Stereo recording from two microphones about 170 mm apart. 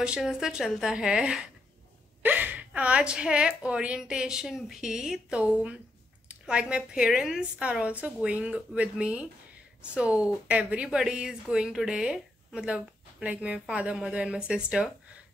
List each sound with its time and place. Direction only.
0.0 s a woman's voice: 5° right (ahead or behind)